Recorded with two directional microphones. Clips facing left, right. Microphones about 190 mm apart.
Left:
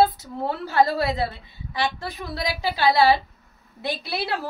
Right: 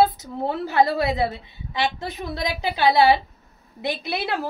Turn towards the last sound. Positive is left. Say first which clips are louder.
# right 2 dB
turn(degrees=-20)  # may be behind; listen again after turning